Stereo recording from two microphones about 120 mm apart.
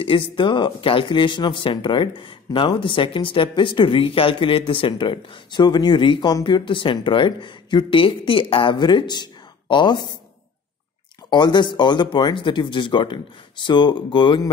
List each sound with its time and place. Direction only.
0.0 s speech: 45° left (ahead or behind)
11.2 s speech: 40° left (ahead or behind)